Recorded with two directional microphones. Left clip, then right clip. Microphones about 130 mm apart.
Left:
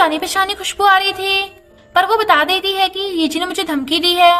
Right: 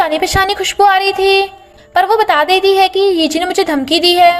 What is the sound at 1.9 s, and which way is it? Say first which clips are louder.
A woman's voice: right 2 dB; 35° right (ahead or behind).